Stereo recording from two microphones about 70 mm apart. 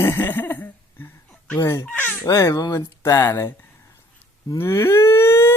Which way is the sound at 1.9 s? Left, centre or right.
Left.